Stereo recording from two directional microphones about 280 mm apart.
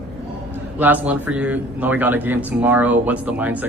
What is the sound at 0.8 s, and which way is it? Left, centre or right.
A man's voice, centre.